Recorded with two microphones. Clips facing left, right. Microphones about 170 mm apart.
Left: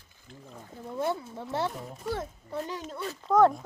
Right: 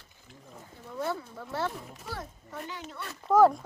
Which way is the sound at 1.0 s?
25° left (ahead or behind).